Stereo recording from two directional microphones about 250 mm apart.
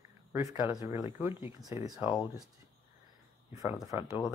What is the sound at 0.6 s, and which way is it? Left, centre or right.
Speech, centre.